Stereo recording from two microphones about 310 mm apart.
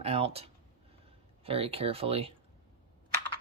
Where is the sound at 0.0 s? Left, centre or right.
Centre.